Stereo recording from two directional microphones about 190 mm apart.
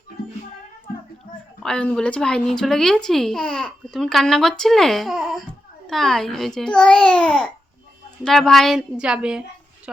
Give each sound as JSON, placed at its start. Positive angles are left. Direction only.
{"t": 1.6, "sound": "speech", "side_deg": 5}